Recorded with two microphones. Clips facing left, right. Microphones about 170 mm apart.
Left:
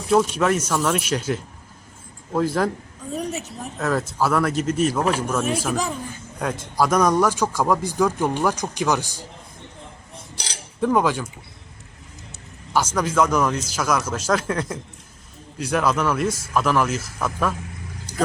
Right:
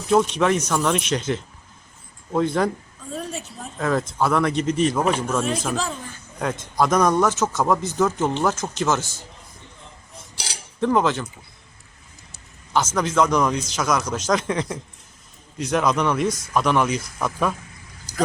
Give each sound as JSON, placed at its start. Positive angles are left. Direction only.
{"t": 0.1, "sound": "speech", "side_deg": 5}
{"t": 3.2, "sound": "a man's voice", "side_deg": 15}
{"t": 3.8, "sound": "a man's voice", "side_deg": 5}
{"t": 10.3, "sound": "cutlery", "side_deg": -10}
{"t": 10.8, "sound": "a man's voice", "side_deg": 5}
{"t": 13.0, "sound": "a man's voice", "side_deg": 10}